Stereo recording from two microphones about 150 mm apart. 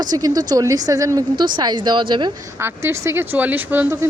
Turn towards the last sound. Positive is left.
turn(degrees=-15)  # may be behind; listen again after turning